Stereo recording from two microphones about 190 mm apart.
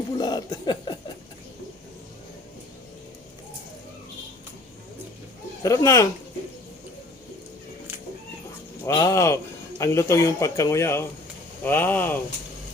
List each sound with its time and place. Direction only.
0.2 s chuckle: 20° left (ahead or behind)
5.6 s a man's voice: 15° left (ahead or behind)
8.8 s a man's voice: 15° left (ahead or behind)